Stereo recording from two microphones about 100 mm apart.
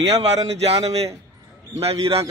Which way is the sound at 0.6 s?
90° right.